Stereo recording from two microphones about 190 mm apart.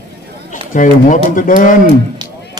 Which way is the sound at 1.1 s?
45° left (ahead or behind).